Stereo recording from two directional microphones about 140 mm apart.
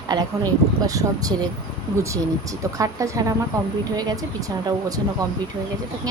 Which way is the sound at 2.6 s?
25° right (ahead or behind).